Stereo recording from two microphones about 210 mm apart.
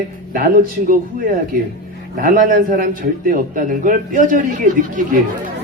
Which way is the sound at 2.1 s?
40° right (ahead or behind).